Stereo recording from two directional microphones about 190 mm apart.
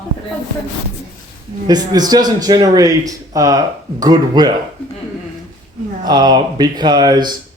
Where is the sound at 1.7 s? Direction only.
20° right (ahead or behind).